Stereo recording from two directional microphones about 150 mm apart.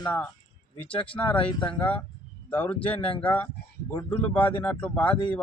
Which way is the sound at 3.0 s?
35° left (ahead or behind).